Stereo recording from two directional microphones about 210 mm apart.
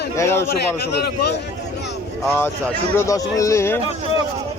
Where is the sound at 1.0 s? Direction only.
50° left (ahead or behind).